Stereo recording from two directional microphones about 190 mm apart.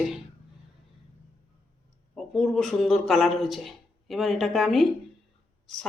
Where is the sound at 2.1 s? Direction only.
Centre (ahead or behind).